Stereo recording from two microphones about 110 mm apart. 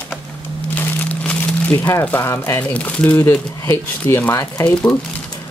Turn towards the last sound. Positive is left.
turn(degrees=15)  # may be behind; listen again after turning